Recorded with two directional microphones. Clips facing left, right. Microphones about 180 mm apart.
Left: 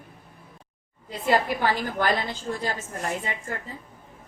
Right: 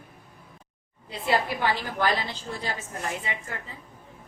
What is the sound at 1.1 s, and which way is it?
A woman's voice, 45° left (ahead or behind).